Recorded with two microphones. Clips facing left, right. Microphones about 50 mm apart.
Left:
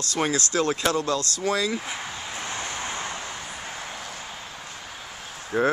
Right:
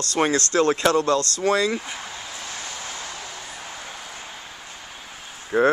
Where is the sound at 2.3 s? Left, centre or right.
Left.